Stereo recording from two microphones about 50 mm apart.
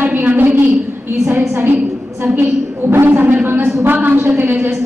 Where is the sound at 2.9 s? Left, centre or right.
Right.